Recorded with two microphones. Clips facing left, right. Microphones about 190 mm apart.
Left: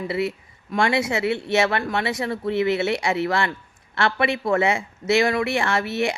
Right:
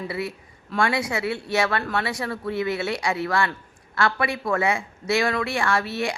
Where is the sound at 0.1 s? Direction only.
20° left (ahead or behind).